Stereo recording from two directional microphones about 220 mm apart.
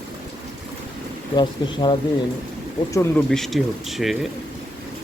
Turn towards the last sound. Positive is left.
turn(degrees=0)  # may be behind; listen again after turning